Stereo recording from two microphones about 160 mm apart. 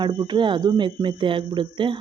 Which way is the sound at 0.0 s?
30° right (ahead or behind).